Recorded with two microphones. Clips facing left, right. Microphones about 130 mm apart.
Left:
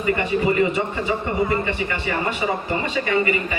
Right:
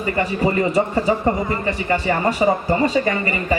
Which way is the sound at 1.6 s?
40° right (ahead or behind).